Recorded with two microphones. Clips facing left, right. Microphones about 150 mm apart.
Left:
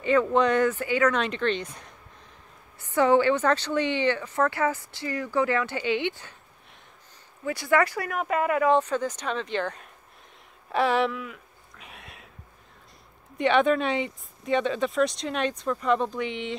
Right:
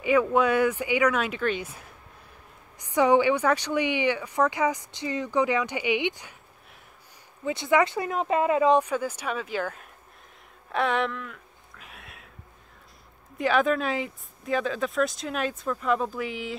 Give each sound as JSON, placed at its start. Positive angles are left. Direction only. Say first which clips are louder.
{"t": 0.0, "sound": "a woman's voice", "louder": "even", "side_deg": -10}
{"t": 7.4, "sound": "a woman's voice", "louder": "right 1 dB", "side_deg": -20}
{"t": 10.7, "sound": "a sound", "louder": "left 2 dB", "side_deg": 0}
{"t": 13.4, "sound": "speech", "louder": "left 2 dB", "side_deg": 0}